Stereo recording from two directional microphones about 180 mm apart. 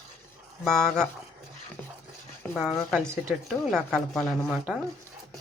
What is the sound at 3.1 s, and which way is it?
Speech, 15° right (ahead or behind).